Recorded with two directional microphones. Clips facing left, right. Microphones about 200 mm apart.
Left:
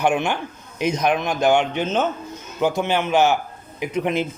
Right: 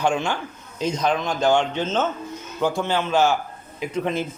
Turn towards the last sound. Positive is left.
turn(degrees=15)  # may be behind; listen again after turning